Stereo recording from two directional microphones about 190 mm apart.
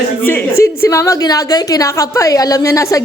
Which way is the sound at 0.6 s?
15° left (ahead or behind).